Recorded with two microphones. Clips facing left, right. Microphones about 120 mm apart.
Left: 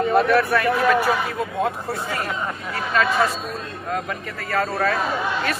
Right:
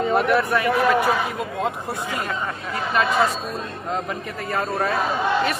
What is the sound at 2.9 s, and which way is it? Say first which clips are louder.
A man's voice: even; 20° right (ahead or behind).